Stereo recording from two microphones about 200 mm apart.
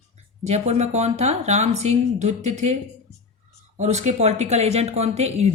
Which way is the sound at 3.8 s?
35° right (ahead or behind).